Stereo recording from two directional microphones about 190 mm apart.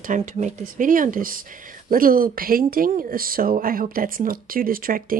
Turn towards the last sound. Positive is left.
turn(degrees=-50)  # may be behind; listen again after turning